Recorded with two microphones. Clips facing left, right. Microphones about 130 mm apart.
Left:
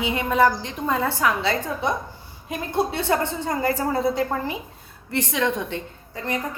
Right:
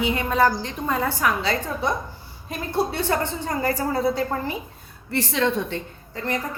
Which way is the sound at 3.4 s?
20° left (ahead or behind).